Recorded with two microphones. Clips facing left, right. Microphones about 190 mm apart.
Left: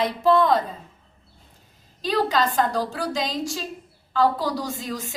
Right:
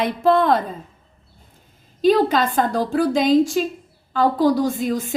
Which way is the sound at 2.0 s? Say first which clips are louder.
Right 6 dB; 50° right (ahead or behind).